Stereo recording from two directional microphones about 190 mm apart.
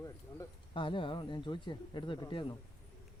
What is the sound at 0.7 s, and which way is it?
Speech, 25° left (ahead or behind).